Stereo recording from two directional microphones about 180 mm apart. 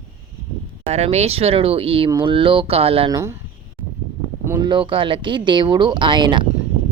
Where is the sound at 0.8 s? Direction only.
35° right (ahead or behind).